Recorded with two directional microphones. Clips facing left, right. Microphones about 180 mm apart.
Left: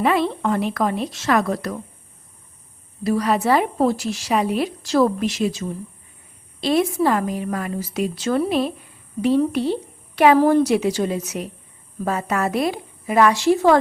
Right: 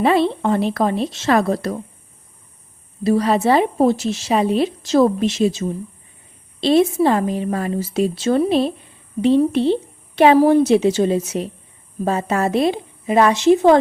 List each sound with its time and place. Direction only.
0.0 s a woman's voice: 30° right (ahead or behind)
3.0 s a woman's voice: 25° right (ahead or behind)